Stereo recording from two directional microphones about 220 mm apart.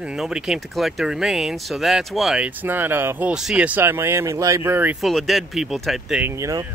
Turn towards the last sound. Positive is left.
turn(degrees=-15)  # may be behind; listen again after turning